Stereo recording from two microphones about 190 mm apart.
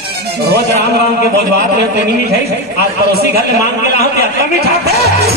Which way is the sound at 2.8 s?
55° right (ahead or behind).